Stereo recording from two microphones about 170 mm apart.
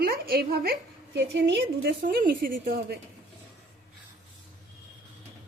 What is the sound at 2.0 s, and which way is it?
Speech, 55° right (ahead or behind).